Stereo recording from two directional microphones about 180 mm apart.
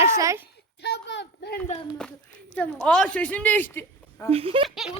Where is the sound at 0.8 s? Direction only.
80° left.